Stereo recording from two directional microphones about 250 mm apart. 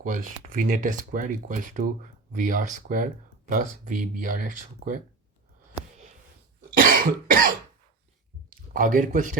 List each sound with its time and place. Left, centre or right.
0.0 s speech: right
6.7 s cough: right
8.4 s a man's voice: right